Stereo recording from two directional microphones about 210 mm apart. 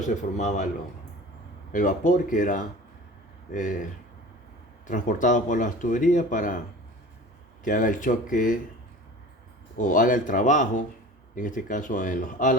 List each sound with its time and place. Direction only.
0.3 s speech: 35° left (ahead or behind)
1.7 s speech: 40° left (ahead or behind)
4.9 s speech: 35° left (ahead or behind)
7.6 s speech: 40° left (ahead or behind)
9.7 s speech: 40° left (ahead or behind)